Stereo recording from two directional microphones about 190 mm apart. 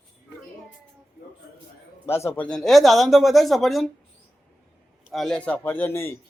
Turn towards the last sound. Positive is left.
turn(degrees=10)  # may be behind; listen again after turning